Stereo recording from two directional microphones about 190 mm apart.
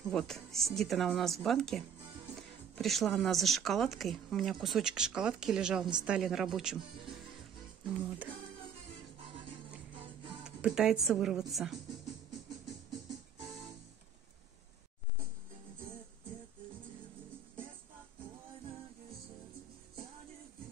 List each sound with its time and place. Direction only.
0.1 s speech: centre (ahead or behind)
10.4 s speech: 5° right (ahead or behind)